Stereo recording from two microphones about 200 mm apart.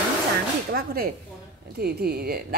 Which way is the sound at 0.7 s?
50° right (ahead or behind).